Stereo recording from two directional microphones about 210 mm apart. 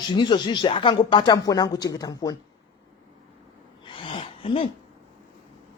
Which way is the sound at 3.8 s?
25° left (ahead or behind).